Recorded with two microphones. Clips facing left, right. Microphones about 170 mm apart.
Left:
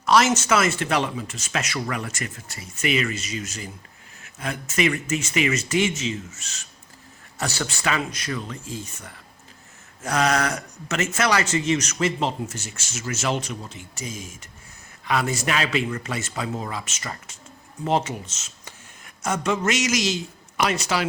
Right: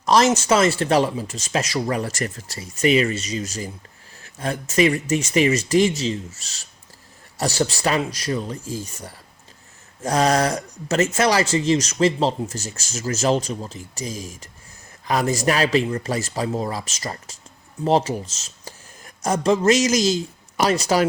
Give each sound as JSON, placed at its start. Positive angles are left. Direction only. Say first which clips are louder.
{"t": 0.0, "sound": "speech", "louder": "right 2 dB", "side_deg": -35}